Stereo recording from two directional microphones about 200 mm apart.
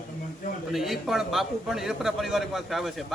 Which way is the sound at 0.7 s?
Centre (ahead or behind).